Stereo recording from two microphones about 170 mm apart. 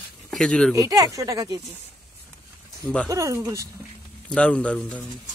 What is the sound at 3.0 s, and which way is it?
Speech, 20° right (ahead or behind).